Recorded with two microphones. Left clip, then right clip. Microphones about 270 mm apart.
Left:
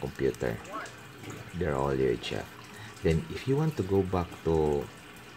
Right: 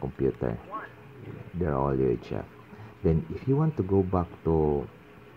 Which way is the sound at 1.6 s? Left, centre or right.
Centre.